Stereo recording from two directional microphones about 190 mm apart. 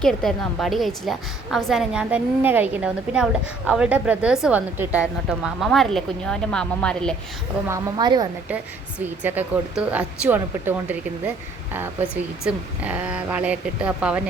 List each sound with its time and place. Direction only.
0.0 s a woman's voice: 5° left (ahead or behind)
7.7 s a woman's voice: 25° right (ahead or behind)
9.0 s speech: 10° right (ahead or behind)